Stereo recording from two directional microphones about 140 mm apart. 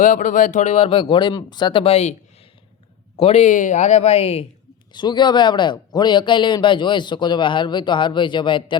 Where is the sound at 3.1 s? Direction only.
50° left (ahead or behind).